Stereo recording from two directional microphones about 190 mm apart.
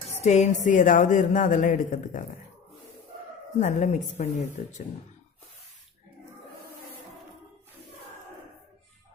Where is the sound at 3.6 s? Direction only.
40° left (ahead or behind).